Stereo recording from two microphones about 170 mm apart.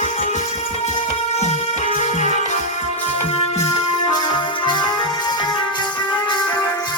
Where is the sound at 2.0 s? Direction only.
45° left (ahead or behind).